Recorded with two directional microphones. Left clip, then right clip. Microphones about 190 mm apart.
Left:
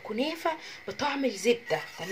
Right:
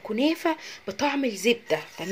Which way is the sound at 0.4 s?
45° right (ahead or behind).